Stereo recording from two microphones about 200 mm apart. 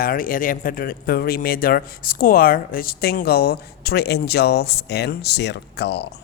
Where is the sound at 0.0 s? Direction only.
45° left (ahead or behind).